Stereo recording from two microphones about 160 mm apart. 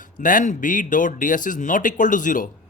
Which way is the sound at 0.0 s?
55° left (ahead or behind).